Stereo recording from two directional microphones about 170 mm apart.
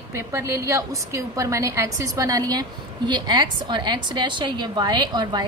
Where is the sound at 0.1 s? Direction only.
15° right (ahead or behind).